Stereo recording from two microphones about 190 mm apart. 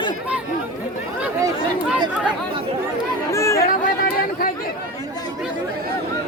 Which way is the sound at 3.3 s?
15° left (ahead or behind).